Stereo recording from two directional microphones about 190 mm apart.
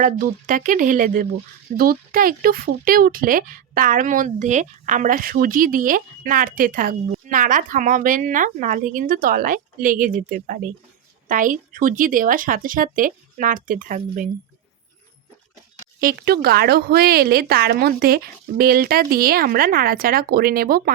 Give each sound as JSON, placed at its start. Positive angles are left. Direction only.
{"t": 0.0, "sound": "speech", "side_deg": -45}
{"t": 16.0, "sound": "speech", "side_deg": -55}